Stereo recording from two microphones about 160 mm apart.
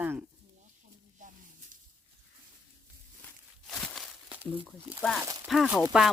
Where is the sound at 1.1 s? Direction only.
55° right (ahead or behind).